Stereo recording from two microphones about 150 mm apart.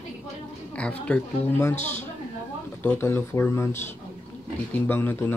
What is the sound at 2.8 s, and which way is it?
Speech, 15° left (ahead or behind).